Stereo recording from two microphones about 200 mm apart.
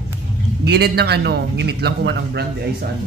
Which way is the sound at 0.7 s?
55° right (ahead or behind).